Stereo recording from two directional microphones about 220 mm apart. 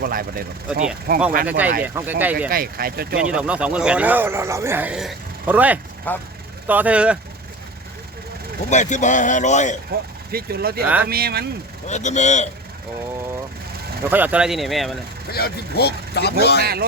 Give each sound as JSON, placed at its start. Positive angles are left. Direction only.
{"t": 0.0, "sound": "speech", "side_deg": -40}
{"t": 1.5, "sound": "speech", "side_deg": -5}
{"t": 2.5, "sound": "speech", "side_deg": -40}
{"t": 3.2, "sound": "speech", "side_deg": -5}
{"t": 6.1, "sound": "speech", "side_deg": 10}
{"t": 6.7, "sound": "speech", "side_deg": -5}
{"t": 8.7, "sound": "speech", "side_deg": 35}
{"t": 9.9, "sound": "speech", "side_deg": -45}
{"t": 10.8, "sound": "speech", "side_deg": -5}
{"t": 11.1, "sound": "speech", "side_deg": -45}
{"t": 11.9, "sound": "speech", "side_deg": 30}
{"t": 14.1, "sound": "speech", "side_deg": -5}
{"t": 15.3, "sound": "speech", "side_deg": 45}